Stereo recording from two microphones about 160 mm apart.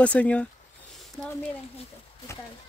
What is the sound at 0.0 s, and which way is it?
Speech, 10° left (ahead or behind).